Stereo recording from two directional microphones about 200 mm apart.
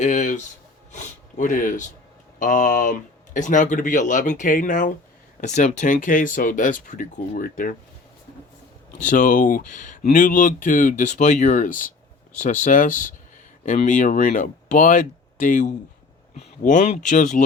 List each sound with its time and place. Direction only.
0.0 s speech: 35° left (ahead or behind)
9.0 s speech: 40° left (ahead or behind)